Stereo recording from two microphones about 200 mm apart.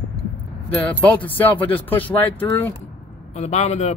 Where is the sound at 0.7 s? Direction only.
10° left (ahead or behind).